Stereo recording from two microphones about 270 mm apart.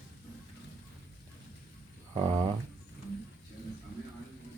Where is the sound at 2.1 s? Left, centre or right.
Centre.